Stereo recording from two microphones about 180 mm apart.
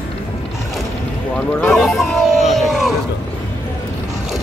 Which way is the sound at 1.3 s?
5° left (ahead or behind).